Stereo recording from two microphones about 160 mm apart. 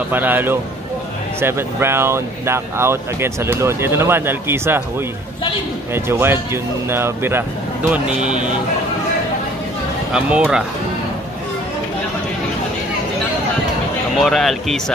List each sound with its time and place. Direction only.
0.1 s speech: 10° right (ahead or behind)
5.9 s speech: 15° right (ahead or behind)
10.1 s speech: 5° right (ahead or behind)
14.2 s speech: centre (ahead or behind)